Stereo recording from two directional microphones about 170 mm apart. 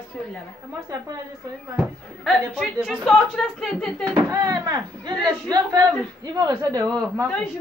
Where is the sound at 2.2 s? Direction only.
Centre (ahead or behind).